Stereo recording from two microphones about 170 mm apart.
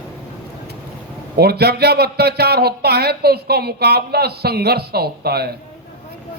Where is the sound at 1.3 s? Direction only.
70° right (ahead or behind).